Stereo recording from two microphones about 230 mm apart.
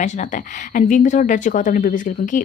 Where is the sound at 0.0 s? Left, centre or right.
Left.